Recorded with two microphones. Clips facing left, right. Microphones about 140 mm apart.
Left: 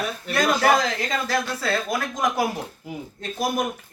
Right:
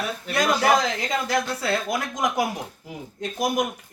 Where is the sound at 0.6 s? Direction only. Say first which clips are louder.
Left 1 dB; 20° right (ahead or behind).